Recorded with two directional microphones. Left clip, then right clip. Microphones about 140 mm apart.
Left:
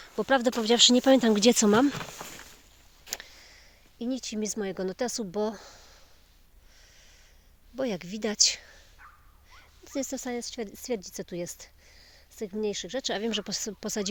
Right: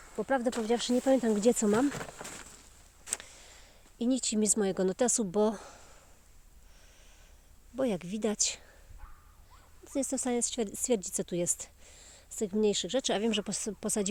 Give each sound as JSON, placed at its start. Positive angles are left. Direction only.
{"t": 0.3, "sound": "speech", "side_deg": 30}
{"t": 1.4, "sound": "speech", "side_deg": 30}
{"t": 3.1, "sound": "speech", "side_deg": -25}
{"t": 7.8, "sound": "speech", "side_deg": -10}
{"t": 9.8, "sound": "a sound", "side_deg": -15}
{"t": 10.2, "sound": "speech", "side_deg": -35}
{"t": 13.1, "sound": "speech", "side_deg": -20}